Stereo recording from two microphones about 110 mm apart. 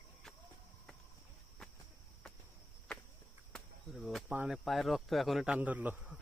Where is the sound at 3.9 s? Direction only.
Centre (ahead or behind).